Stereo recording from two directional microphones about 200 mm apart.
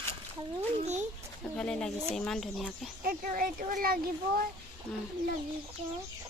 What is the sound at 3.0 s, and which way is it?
Speech, 45° right (ahead or behind).